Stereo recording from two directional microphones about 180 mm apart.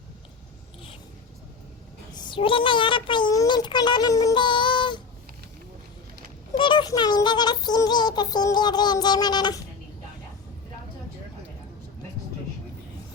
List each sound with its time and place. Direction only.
2.1 s a child's voice: 25° left (ahead or behind)
6.6 s speech: 25° left (ahead or behind)